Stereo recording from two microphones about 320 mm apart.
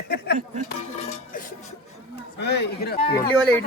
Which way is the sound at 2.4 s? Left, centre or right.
Left.